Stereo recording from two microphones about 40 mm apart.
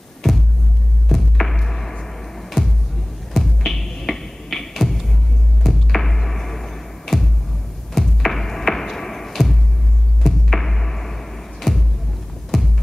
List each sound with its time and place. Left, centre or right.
1.0 s music: centre
3.3 s music: centre
12.5 s hum: centre